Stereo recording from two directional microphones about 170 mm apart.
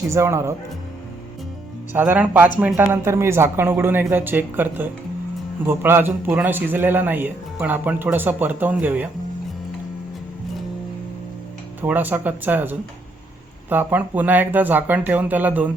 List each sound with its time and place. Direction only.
0.1 s a man's voice: 15° right (ahead or behind)
2.0 s a man's voice: 10° right (ahead or behind)
11.8 s a man's voice: 10° right (ahead or behind)